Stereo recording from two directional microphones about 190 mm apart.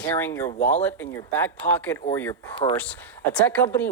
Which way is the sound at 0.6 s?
40° left (ahead or behind).